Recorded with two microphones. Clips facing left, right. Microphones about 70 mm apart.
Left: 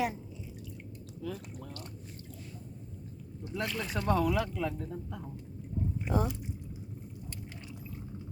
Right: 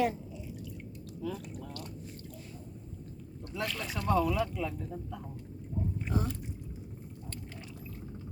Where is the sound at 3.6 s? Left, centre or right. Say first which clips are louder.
Even; centre.